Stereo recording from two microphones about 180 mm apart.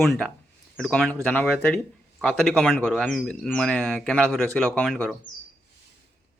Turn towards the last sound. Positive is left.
turn(degrees=10)  # may be behind; listen again after turning